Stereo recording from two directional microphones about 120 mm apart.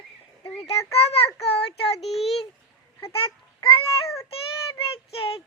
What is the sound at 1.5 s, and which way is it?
Child singing, 55° left (ahead or behind).